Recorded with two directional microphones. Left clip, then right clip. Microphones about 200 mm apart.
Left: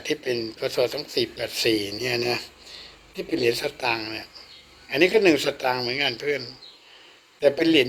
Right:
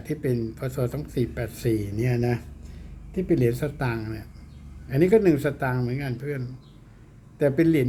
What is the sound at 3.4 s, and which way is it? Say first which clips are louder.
Speech: left 3 dB; 10° left (ahead or behind).